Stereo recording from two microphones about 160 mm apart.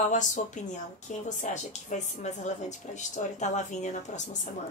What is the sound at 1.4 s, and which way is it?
Speech, 50° left (ahead or behind).